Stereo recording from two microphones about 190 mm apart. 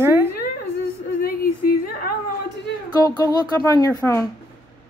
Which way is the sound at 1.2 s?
50° left (ahead or behind).